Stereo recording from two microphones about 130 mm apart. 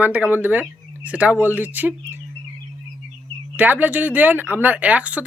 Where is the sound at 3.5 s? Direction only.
10° right (ahead or behind).